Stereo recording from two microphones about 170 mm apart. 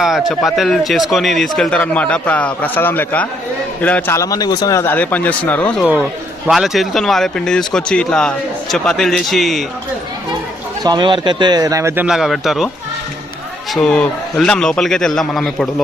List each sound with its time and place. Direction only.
0.0 s a man's voice: centre (ahead or behind)
10.8 s speech: 25° right (ahead or behind)
12.0 s speech: centre (ahead or behind)
13.7 s speech: 5° left (ahead or behind)